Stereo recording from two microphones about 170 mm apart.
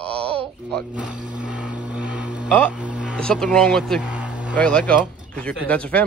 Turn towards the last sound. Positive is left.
turn(degrees=10)  # may be behind; listen again after turning